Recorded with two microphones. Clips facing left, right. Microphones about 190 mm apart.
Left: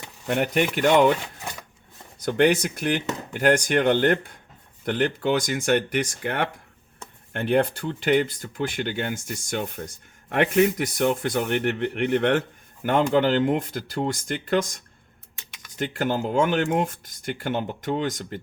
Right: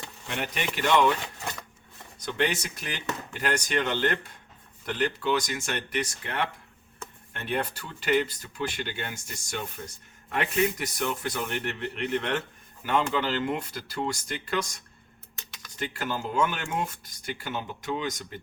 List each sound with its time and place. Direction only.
0.3 s speech: 55° left (ahead or behind)
2.4 s speech: 55° left (ahead or behind)
15.4 s computer keyboard: 15° left (ahead or behind)
15.8 s speech: 50° left (ahead or behind)